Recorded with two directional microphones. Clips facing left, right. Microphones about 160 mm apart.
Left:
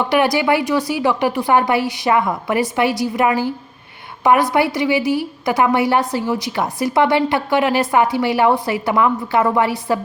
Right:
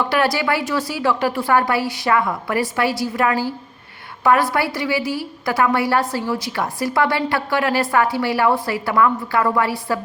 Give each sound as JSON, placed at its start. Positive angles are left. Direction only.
{"t": 0.1, "sound": "a woman's voice", "side_deg": 20}